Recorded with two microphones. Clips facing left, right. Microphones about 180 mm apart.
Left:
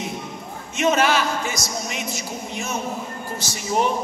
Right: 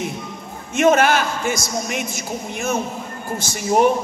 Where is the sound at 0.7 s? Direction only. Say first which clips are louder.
Right 4 dB; 50° right (ahead or behind).